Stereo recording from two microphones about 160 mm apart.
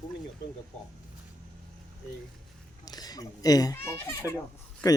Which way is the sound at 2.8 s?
25° left (ahead or behind).